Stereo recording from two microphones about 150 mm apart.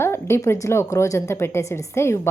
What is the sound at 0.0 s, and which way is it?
Speech, 15° left (ahead or behind).